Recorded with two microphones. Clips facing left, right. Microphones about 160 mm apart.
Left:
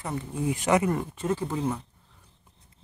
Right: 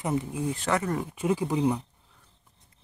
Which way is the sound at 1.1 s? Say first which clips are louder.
Right 2 dB; 10° right (ahead or behind).